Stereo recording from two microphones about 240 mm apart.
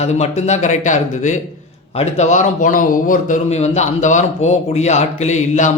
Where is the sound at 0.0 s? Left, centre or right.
Left.